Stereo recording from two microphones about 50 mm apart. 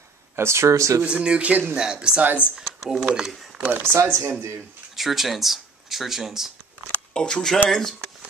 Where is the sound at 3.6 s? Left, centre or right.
Right.